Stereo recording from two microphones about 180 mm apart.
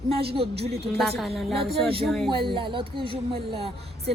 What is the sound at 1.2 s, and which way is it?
A woman's voice, centre (ahead or behind).